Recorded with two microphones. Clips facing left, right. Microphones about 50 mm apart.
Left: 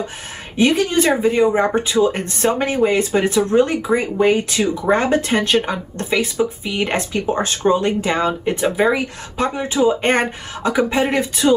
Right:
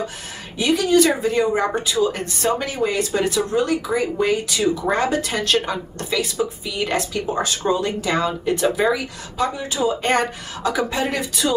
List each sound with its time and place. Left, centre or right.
0.6 s speech: left